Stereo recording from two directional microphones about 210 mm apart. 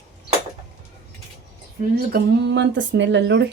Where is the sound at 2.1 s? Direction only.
55° right (ahead or behind).